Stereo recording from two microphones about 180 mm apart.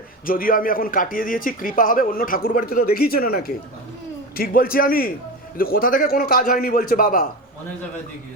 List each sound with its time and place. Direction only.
0.3 s a man's voice: 50° left (ahead or behind)